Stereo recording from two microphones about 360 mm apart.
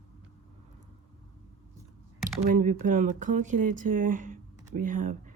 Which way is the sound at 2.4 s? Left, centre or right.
Right.